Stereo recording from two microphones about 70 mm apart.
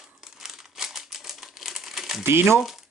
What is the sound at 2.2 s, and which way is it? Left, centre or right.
Speech, right.